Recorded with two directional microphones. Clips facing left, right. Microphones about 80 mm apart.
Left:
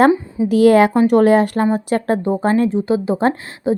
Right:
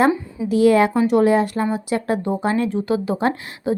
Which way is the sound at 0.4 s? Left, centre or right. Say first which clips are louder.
Left 4 dB; left.